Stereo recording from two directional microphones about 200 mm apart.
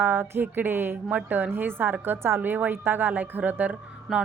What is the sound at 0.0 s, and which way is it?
A woman's voice, 10° right (ahead or behind).